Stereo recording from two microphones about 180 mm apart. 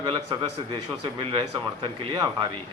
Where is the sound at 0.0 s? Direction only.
30° right (ahead or behind).